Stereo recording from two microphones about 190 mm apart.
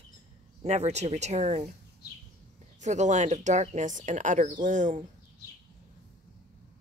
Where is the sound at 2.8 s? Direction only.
40° right (ahead or behind).